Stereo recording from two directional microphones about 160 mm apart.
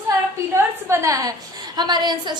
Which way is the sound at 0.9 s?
20° right (ahead or behind).